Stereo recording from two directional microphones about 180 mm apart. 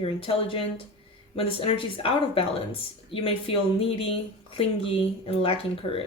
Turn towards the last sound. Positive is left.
turn(degrees=30)  # may be behind; listen again after turning